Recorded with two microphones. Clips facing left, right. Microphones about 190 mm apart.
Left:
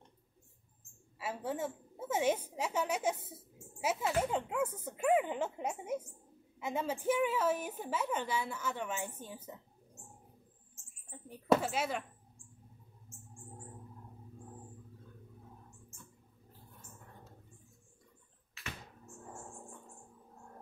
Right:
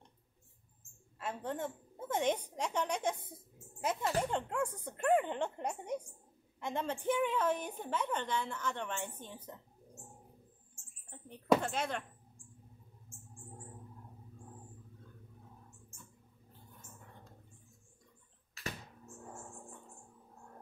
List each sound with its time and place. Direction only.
1.1 s a woman's voice: 5° left (ahead or behind)
11.1 s speech: 5° left (ahead or behind)